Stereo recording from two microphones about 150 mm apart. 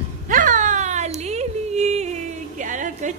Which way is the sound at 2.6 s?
60° right (ahead or behind).